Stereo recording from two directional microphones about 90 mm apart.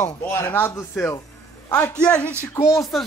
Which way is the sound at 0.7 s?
30° left (ahead or behind).